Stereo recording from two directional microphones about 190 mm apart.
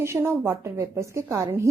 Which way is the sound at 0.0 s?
15° right (ahead or behind).